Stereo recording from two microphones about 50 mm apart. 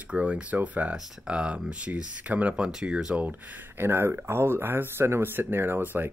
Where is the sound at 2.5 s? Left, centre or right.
Centre.